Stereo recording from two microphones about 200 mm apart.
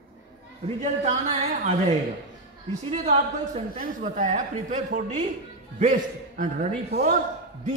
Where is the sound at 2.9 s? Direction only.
35° right (ahead or behind).